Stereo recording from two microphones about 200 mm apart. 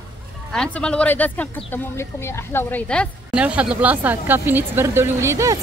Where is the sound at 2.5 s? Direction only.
5° left (ahead or behind).